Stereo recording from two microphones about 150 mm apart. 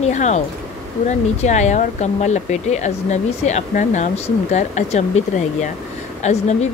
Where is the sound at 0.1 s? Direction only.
50° left (ahead or behind).